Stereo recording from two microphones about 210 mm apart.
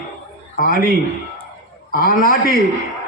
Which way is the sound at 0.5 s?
45° left (ahead or behind).